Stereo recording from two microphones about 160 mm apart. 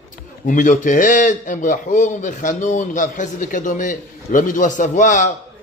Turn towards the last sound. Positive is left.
turn(degrees=50)  # may be behind; listen again after turning